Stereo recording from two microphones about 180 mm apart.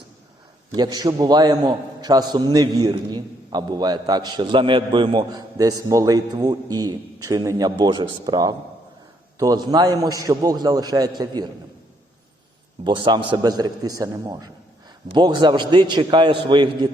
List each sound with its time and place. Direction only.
0.8 s a man's voice: 25° right (ahead or behind)
13.1 s a man's voice: 25° right (ahead or behind)